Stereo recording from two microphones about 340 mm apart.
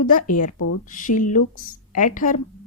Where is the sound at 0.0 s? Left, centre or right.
Left.